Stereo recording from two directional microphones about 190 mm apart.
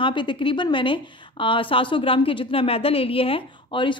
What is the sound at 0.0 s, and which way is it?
A woman's voice, 25° left (ahead or behind).